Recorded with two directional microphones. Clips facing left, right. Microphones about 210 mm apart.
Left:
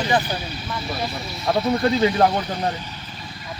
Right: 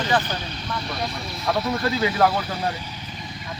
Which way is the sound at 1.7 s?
25° left (ahead or behind).